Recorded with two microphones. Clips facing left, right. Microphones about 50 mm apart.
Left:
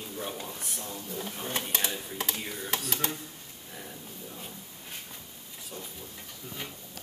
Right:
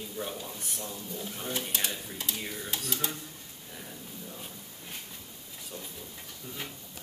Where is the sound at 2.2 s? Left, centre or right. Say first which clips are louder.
Left 2 dB; left.